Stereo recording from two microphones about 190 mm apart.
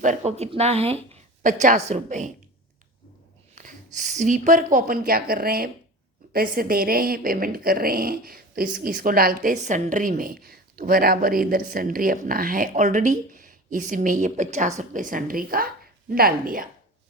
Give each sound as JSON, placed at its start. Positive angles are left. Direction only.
{"t": 0.3, "sound": "speech", "side_deg": -35}
{"t": 1.4, "sound": "speech", "side_deg": -45}
{"t": 3.5, "sound": "a sound", "side_deg": -45}
{"t": 3.9, "sound": "a woman's voice", "side_deg": -40}